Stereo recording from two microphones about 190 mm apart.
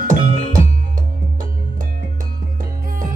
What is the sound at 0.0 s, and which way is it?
Music, 40° right (ahead or behind).